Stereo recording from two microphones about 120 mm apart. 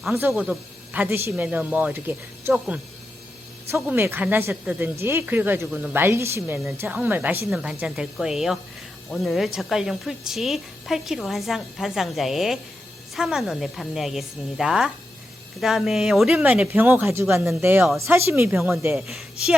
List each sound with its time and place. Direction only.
0.2 s speech: 15° right (ahead or behind)
3.8 s speech: 15° right (ahead or behind)
18.9 s a woman's voice: centre (ahead or behind)